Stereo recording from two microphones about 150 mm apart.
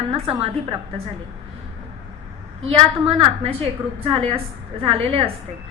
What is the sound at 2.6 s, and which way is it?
A woman's voice, 40° right (ahead or behind).